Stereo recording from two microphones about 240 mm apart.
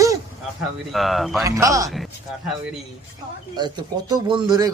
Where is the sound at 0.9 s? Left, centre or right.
Centre.